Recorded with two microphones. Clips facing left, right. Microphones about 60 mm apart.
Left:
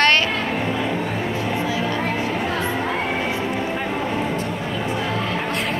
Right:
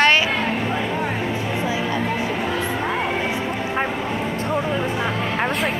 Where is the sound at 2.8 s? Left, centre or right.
Centre.